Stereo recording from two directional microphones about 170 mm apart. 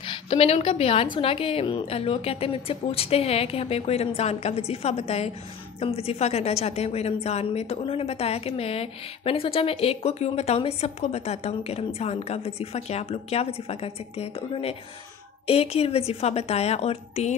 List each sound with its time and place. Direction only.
0.0 s a woman's voice: 30° left (ahead or behind)